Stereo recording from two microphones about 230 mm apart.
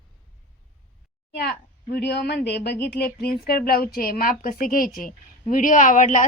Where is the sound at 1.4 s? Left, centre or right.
Left.